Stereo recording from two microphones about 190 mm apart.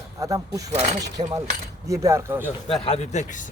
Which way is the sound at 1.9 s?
15° right (ahead or behind).